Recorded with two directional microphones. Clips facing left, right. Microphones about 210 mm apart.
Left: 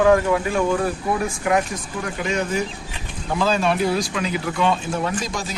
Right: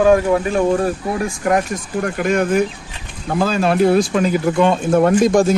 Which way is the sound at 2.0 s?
55° right (ahead or behind).